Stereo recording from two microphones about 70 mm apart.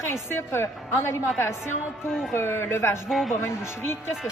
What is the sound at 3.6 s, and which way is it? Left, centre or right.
Speech, left.